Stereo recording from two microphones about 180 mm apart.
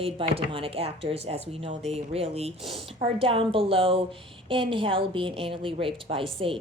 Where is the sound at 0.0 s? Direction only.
30° right (ahead or behind).